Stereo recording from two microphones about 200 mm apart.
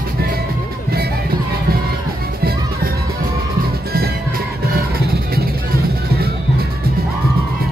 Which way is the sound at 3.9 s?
50° right (ahead or behind).